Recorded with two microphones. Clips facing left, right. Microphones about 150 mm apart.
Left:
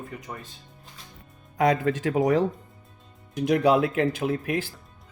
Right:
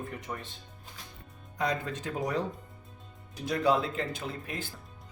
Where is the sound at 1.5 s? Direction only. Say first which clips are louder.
Left 10 dB; 75° left (ahead or behind).